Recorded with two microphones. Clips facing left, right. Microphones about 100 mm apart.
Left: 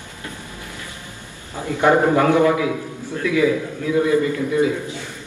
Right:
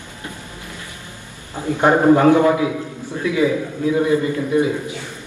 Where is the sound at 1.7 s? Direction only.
25° right (ahead or behind).